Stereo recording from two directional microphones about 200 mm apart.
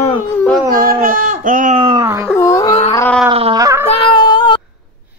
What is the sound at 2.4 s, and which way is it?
Cat, 15° left (ahead or behind).